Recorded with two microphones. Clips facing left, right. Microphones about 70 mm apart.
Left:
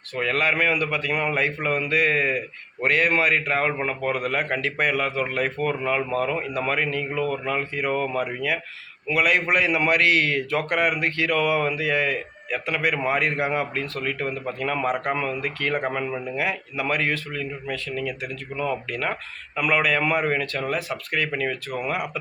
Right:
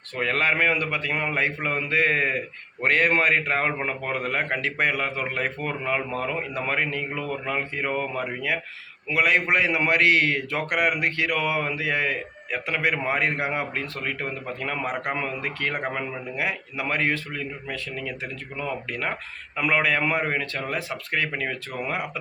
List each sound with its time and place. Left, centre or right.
0.2 s a man's voice: right